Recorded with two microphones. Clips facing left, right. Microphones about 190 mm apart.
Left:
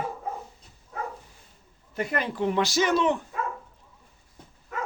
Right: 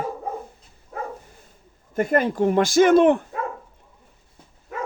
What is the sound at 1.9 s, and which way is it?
Speech, 45° right (ahead or behind).